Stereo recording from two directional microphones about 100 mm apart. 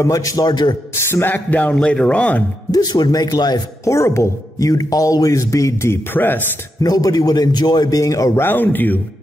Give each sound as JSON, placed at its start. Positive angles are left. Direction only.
{"t": 0.0, "sound": "speech", "side_deg": 35}
{"t": 1.1, "sound": "speech", "side_deg": 20}
{"t": 2.7, "sound": "speech", "side_deg": 40}
{"t": 3.8, "sound": "speech", "side_deg": 30}
{"t": 6.8, "sound": "speech", "side_deg": 40}
{"t": 8.5, "sound": "speech", "side_deg": 20}